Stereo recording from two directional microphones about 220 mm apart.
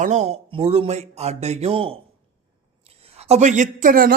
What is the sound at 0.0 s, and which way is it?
Speech, 30° right (ahead or behind).